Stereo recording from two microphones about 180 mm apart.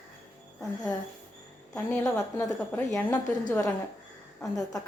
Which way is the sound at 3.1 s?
20° left (ahead or behind).